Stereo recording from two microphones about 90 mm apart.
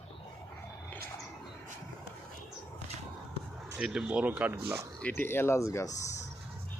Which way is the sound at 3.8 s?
5° right (ahead or behind).